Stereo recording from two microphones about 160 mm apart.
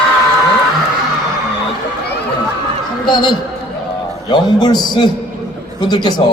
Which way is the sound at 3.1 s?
30° left (ahead or behind).